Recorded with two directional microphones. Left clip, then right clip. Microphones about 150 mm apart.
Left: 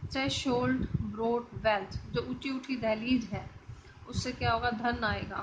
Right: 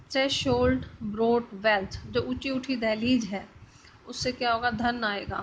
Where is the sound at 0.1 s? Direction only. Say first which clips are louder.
Right 6 dB; 35° right (ahead or behind).